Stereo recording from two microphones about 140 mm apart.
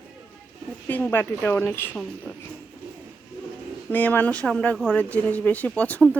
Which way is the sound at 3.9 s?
15° left (ahead or behind).